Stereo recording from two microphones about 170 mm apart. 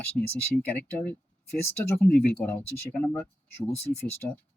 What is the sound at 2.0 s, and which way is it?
Speech, 60° left (ahead or behind).